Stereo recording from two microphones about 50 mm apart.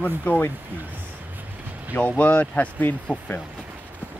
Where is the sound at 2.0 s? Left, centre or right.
Left.